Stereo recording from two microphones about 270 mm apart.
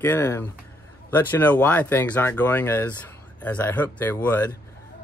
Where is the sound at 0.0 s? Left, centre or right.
Centre.